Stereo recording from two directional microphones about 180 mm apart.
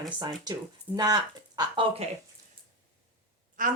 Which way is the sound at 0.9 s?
20° right (ahead or behind).